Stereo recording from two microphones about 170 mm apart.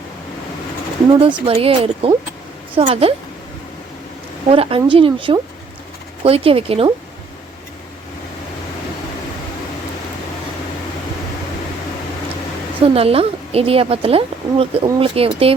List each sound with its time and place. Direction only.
1.2 s a woman's voice: 35° right (ahead or behind)
4.4 s a woman's voice: 35° right (ahead or behind)
12.9 s a woman's voice: 35° right (ahead or behind)